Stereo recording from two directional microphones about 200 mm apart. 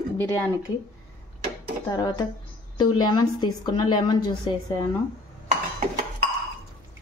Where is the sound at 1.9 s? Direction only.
20° left (ahead or behind).